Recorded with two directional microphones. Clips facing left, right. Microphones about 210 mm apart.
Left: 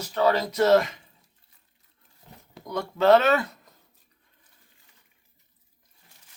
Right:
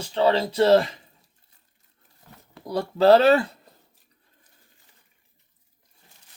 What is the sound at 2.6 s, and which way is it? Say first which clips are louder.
Speech: right 3 dB; 35° right (ahead or behind).